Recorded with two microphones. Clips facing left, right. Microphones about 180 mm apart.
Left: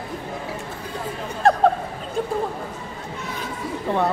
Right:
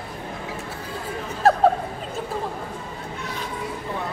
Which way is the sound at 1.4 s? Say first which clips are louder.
Even; 5° right (ahead or behind).